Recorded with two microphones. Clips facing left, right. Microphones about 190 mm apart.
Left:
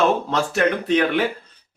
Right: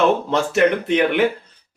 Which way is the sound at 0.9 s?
20° right (ahead or behind).